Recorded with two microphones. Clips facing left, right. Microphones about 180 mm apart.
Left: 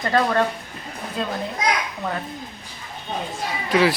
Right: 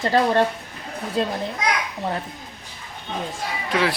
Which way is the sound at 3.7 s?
5° left (ahead or behind).